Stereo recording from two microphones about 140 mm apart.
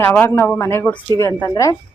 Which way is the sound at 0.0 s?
15° left (ahead or behind).